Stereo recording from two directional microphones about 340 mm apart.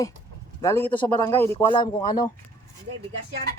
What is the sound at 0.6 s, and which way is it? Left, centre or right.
Speech, centre.